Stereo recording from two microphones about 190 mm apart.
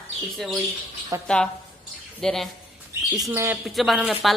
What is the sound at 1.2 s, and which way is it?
Speech, 5° left (ahead or behind).